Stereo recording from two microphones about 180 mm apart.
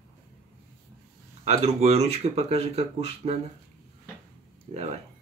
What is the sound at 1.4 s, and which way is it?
Speech, 35° right (ahead or behind).